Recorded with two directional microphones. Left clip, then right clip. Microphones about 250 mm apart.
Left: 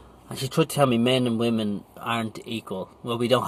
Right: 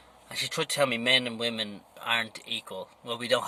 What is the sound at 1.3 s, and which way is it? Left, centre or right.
Speech, left.